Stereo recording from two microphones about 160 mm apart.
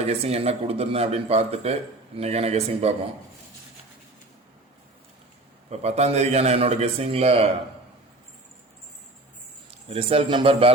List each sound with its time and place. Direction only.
0.0 s speech: 40° right (ahead or behind)
5.8 s speech: 40° right (ahead or behind)
9.9 s speech: 35° right (ahead or behind)